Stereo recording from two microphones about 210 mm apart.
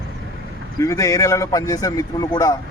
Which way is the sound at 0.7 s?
15° left (ahead or behind).